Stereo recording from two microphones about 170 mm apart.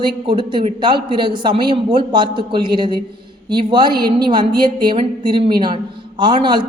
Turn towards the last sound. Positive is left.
turn(degrees=-30)  # may be behind; listen again after turning